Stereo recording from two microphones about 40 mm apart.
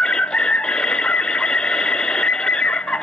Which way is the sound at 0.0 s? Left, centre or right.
Left.